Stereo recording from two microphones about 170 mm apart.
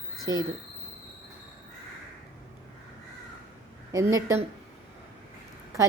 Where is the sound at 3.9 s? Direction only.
20° right (ahead or behind).